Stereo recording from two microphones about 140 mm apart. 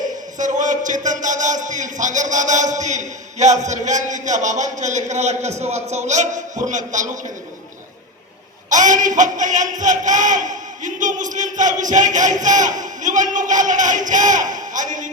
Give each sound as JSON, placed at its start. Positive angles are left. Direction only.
{"t": 0.3, "sound": "speech", "side_deg": -65}
{"t": 8.7, "sound": "speech", "side_deg": -65}